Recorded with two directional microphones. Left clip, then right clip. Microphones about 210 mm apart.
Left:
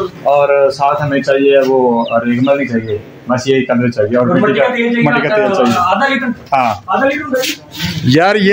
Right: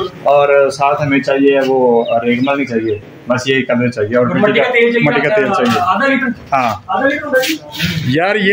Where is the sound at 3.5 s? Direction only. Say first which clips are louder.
Left 2 dB; 10° left (ahead or behind).